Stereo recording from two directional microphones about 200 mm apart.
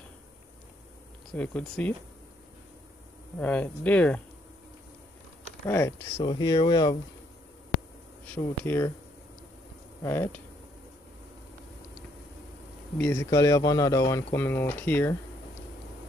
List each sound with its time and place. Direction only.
1.3 s speech: 5° left (ahead or behind)
3.3 s speech: 5° left (ahead or behind)
5.7 s speech: 10° left (ahead or behind)
8.6 s speech: 10° left (ahead or behind)
10.0 s speech: 10° left (ahead or behind)
12.9 s speech: 10° left (ahead or behind)